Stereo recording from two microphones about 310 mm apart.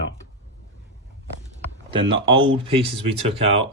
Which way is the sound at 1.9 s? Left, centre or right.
Centre.